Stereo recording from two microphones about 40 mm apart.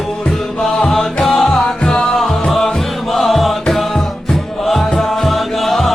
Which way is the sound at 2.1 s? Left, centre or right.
Centre.